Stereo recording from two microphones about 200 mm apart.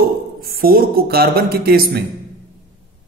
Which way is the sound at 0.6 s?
45° right (ahead or behind).